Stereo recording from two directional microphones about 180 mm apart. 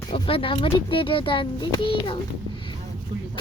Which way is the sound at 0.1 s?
30° left (ahead or behind).